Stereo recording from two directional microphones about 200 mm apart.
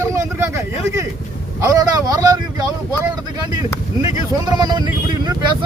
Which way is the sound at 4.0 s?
20° right (ahead or behind).